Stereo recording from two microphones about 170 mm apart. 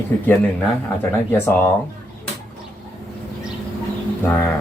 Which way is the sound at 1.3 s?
10° left (ahead or behind).